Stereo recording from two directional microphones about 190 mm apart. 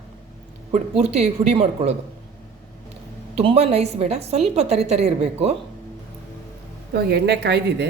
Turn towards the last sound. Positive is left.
turn(degrees=-60)  # may be behind; listen again after turning